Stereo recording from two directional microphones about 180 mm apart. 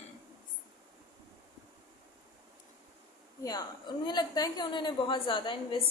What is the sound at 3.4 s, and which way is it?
A woman's voice, 25° left (ahead or behind).